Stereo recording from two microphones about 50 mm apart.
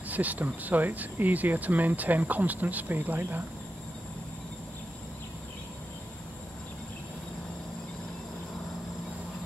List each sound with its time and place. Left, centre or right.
0.1 s speech: right